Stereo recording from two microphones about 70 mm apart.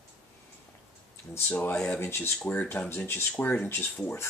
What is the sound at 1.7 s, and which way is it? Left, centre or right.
Speech, centre.